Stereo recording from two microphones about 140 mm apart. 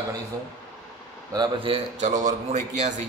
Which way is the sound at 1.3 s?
30° right (ahead or behind).